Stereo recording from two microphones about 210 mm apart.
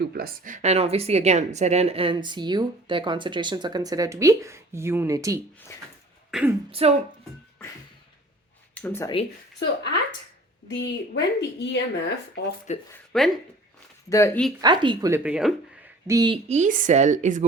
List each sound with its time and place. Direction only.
0.1 s a woman's voice: 45° right (ahead or behind); by 5.4 s 15° right (ahead or behind)
6.3 s speech: centre (ahead or behind)
6.7 s a woman's voice: 25° right (ahead or behind)
8.7 s speech: 10° left (ahead or behind)
10.7 s speech: 55° left (ahead or behind)
13.1 s speech: centre (ahead or behind)
14.1 s speech: 15° left (ahead or behind)
14.6 s a woman's voice: 20° right (ahead or behind)
15.2 s speech: 5° right (ahead or behind)
16.5 s a woman's voice: 35° right (ahead or behind)